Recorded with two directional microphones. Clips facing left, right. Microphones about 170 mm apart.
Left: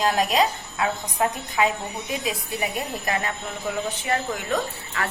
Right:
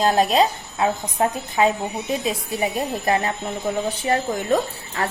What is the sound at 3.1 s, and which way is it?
A woman's voice, 30° right (ahead or behind).